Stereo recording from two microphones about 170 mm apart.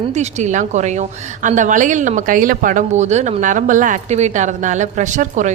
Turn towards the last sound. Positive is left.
turn(degrees=-45)  # may be behind; listen again after turning